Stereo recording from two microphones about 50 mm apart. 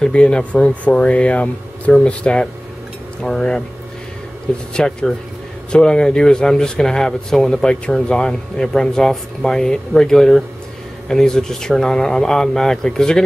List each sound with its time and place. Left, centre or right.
0.0 s speech: centre
5.7 s speech: centre